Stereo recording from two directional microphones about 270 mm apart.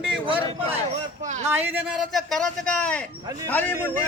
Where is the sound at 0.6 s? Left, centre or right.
Right.